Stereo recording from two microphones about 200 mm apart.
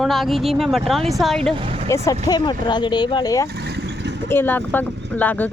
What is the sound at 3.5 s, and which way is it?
Vehicle, 55° right (ahead or behind).